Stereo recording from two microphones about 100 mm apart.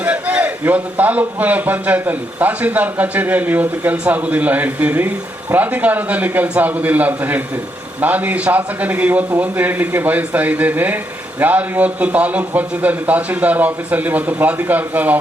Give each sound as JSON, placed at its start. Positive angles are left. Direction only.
{"t": 0.0, "sound": "a man's voice", "side_deg": -15}